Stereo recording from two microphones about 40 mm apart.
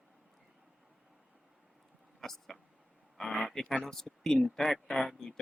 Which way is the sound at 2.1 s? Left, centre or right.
Centre.